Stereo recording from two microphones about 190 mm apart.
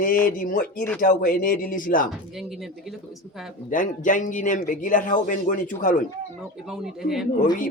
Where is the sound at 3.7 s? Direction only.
45° left (ahead or behind).